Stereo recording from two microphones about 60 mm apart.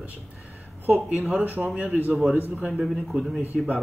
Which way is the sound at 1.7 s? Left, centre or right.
Right.